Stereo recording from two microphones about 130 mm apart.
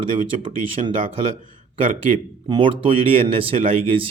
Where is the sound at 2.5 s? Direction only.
40° right (ahead or behind).